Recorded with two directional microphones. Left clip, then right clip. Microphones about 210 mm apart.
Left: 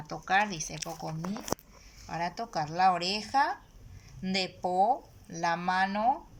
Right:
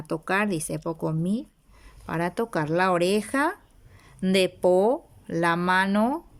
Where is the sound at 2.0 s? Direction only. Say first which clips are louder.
Right 7 dB; 50° right (ahead or behind).